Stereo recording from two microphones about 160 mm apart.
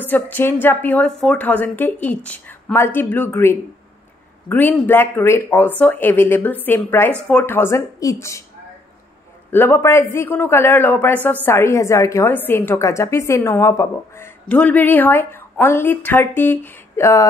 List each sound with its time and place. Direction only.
0.0 s a woman's voice: 10° left (ahead or behind)
9.5 s a woman's voice: 10° left (ahead or behind)